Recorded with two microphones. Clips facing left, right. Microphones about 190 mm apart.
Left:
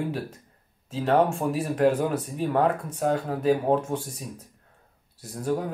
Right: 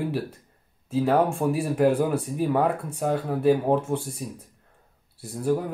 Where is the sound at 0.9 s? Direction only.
10° right (ahead or behind).